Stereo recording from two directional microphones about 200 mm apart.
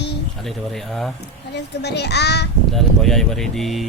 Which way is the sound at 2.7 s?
Centre (ahead or behind).